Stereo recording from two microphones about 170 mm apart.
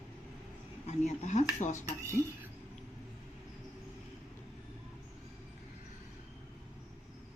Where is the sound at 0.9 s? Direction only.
40° left (ahead or behind).